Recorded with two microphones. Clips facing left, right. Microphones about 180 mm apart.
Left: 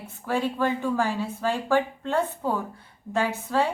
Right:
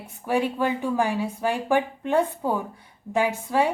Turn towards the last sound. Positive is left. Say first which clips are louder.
# right 2 dB
turn(degrees=-15)  # may be behind; listen again after turning